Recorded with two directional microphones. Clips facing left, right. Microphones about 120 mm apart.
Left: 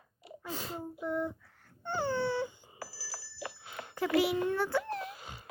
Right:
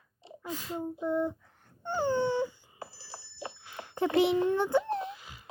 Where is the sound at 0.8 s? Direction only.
20° right (ahead or behind).